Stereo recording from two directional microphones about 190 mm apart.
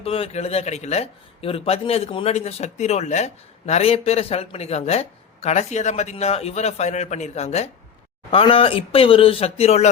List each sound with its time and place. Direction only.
0.0 s a man's voice: 30° left (ahead or behind)